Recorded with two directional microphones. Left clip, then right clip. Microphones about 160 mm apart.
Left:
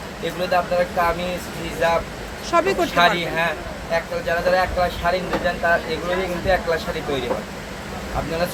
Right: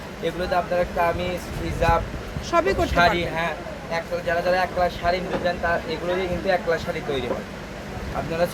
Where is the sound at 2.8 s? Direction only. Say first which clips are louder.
Left 2 dB; 20° right (ahead or behind).